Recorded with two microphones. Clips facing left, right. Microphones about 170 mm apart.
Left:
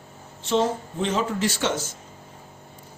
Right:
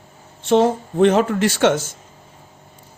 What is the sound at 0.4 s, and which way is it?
A man's voice, 60° right (ahead or behind).